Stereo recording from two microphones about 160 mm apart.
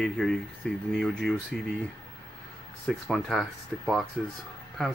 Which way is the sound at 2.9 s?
Centre (ahead or behind).